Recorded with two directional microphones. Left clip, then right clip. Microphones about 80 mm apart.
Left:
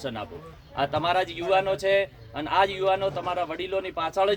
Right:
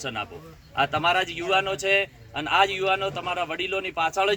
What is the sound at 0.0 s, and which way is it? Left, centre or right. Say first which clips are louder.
A man's voice: right 2 dB; centre.